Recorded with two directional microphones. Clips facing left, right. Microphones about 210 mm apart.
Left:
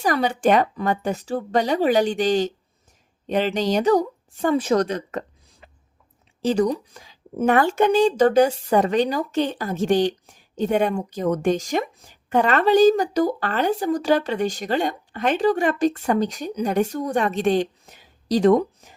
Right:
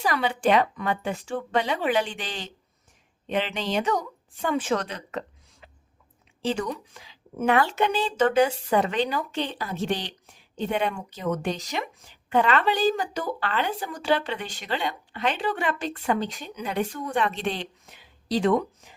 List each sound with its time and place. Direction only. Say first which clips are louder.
0.0 s a woman's voice: left 4 dB; 45° left (ahead or behind)